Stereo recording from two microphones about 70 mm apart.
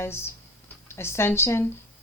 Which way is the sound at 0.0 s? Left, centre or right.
Left.